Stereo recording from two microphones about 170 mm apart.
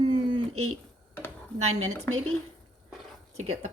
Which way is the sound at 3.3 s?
40° right (ahead or behind).